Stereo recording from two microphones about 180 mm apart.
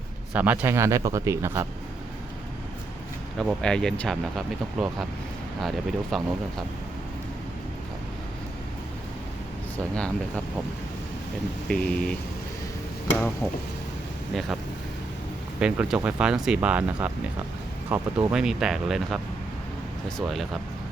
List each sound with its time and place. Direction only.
0.3 s speech: 10° right (ahead or behind)
3.3 s speech: 5° left (ahead or behind)
11.7 s speech: 5° left (ahead or behind)
13.1 s speech: 5° left (ahead or behind)
15.6 s speech: 5° right (ahead or behind)